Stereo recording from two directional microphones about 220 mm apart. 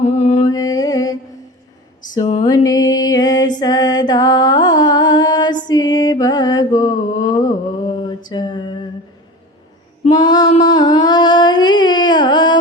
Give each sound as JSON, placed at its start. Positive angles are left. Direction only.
{"t": 0.0, "sound": "music", "side_deg": 30}
{"t": 0.4, "sound": "music", "side_deg": 15}
{"t": 2.4, "sound": "music", "side_deg": 20}
{"t": 10.1, "sound": "female singing", "side_deg": 20}
{"t": 10.6, "sound": "a sound", "side_deg": 20}